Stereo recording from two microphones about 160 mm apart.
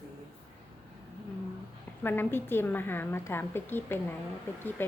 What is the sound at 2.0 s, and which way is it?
A woman's voice, 15° left (ahead or behind).